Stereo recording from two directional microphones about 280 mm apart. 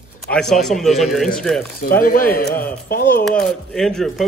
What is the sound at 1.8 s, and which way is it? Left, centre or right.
A man's voice, left.